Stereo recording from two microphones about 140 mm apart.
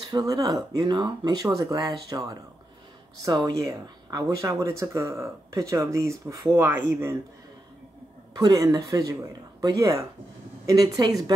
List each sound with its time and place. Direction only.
0.1 s speech: 25° right (ahead or behind)
8.4 s speech: 25° right (ahead or behind)